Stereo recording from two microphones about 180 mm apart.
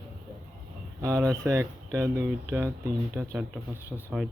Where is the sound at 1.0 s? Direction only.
15° right (ahead or behind).